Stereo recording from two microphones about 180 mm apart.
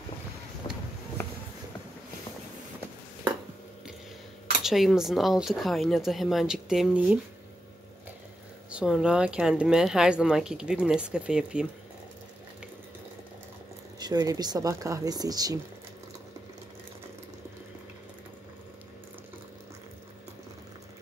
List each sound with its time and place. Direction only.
4.6 s speech: centre (ahead or behind)
8.6 s speech: 5° right (ahead or behind)
13.9 s speech: 20° right (ahead or behind)